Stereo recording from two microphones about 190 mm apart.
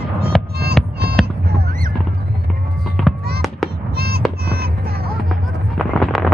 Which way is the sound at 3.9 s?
55° right (ahead or behind).